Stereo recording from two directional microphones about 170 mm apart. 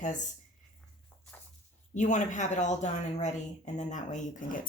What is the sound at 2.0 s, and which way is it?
Speech, 45° left (ahead or behind).